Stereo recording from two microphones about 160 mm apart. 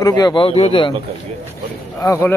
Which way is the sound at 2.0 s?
20° left (ahead or behind).